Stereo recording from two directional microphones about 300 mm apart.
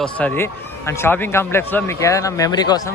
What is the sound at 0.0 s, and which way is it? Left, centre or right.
Speech, centre.